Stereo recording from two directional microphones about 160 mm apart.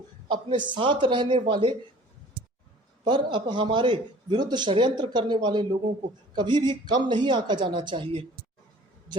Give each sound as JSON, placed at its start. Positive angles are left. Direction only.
{"t": 0.3, "sound": "a man's voice", "side_deg": -30}
{"t": 3.0, "sound": "a man's voice", "side_deg": -30}